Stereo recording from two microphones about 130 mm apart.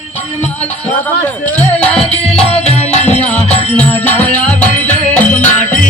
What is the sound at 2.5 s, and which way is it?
Music, 55° left (ahead or behind).